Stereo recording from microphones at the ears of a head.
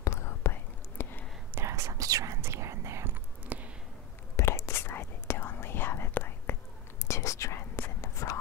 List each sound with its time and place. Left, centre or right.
0.0 s whispering: left
1.5 s whispering: right
4.4 s whispering: left